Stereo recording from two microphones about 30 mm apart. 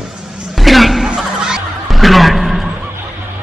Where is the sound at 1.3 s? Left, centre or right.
Right.